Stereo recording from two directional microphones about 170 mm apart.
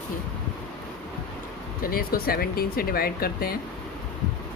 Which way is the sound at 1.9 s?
60° left (ahead or behind).